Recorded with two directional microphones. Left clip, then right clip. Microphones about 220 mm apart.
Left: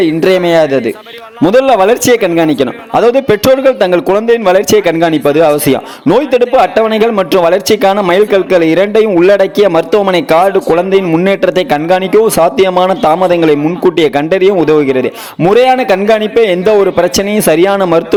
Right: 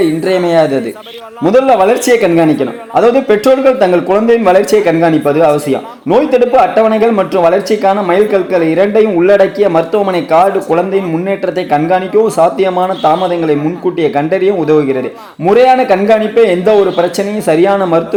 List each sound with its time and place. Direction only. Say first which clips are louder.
0.0 s a man's voice: left 3 dB; 30° left (ahead or behind)